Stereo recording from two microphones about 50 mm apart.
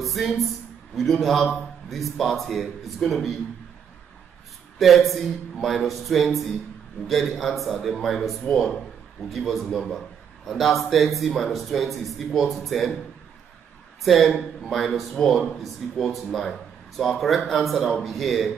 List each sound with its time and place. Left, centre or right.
0.0 s a man's voice: centre
4.7 s a man's voice: centre
14.0 s a man's voice: centre